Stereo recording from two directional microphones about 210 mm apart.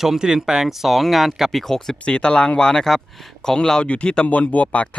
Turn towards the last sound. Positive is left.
turn(degrees=5)  # may be behind; listen again after turning